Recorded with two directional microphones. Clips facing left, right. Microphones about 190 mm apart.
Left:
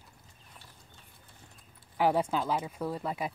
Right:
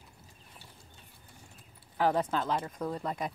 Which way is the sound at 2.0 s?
10° left (ahead or behind).